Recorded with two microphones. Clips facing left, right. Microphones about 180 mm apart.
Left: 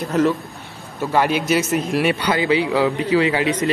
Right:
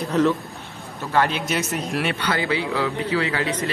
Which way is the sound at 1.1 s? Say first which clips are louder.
Left 4 dB; 10° left (ahead or behind).